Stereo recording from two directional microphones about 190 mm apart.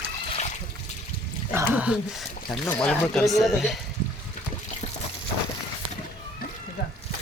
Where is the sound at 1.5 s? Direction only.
10° right (ahead or behind).